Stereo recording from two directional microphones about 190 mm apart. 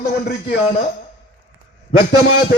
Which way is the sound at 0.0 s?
55° left (ahead or behind).